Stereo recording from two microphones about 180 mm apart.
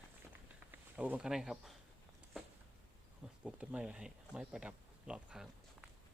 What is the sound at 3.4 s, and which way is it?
Speech, 5° right (ahead or behind).